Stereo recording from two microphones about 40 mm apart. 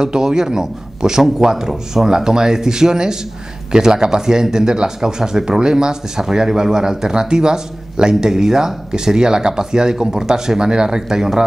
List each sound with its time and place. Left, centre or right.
0.0 s speech: centre